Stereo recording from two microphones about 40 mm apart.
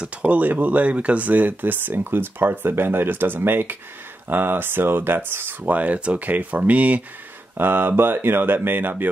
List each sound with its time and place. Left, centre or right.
0.0 s speech: right
5.6 s speech: right
7.5 s speech: right
8.6 s speech: right